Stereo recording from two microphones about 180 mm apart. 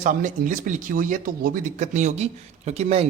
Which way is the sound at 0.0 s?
45° right (ahead or behind).